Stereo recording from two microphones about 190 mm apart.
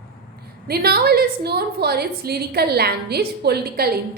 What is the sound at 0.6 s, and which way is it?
A woman's voice, 55° right (ahead or behind).